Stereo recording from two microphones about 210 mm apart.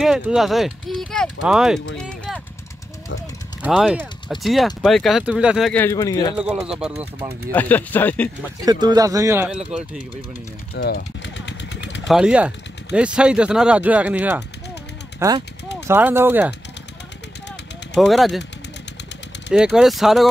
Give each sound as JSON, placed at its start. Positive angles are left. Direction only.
{"t": 0.0, "sound": "speech", "side_deg": -5}
{"t": 2.0, "sound": "run", "side_deg": 0}
{"t": 3.6, "sound": "speech", "side_deg": -5}
{"t": 6.3, "sound": "speech", "side_deg": -5}
{"t": 7.5, "sound": "speech", "side_deg": 10}
{"t": 8.6, "sound": "speech", "side_deg": -20}
{"t": 10.7, "sound": "vehicle", "side_deg": 45}
{"t": 12.1, "sound": "speech", "side_deg": -5}
{"t": 17.9, "sound": "speech", "side_deg": 0}
{"t": 19.5, "sound": "speech", "side_deg": -5}